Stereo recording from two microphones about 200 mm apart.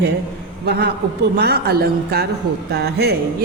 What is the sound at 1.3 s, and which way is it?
A woman's voice, 55° right (ahead or behind).